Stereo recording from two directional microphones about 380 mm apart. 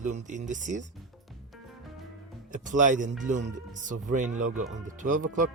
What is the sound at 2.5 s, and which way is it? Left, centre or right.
Speech, centre.